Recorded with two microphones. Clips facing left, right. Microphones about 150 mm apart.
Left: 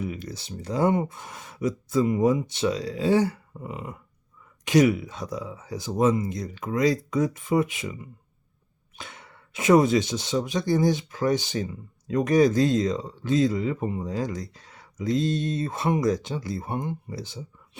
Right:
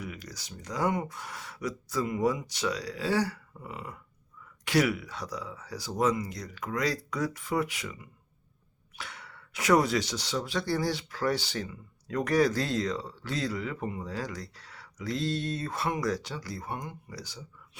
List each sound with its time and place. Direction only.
0.0 s speech: 25° left (ahead or behind)
9.0 s speech: 20° left (ahead or behind)